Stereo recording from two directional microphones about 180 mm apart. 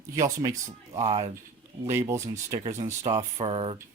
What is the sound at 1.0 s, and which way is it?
Speech, 35° right (ahead or behind).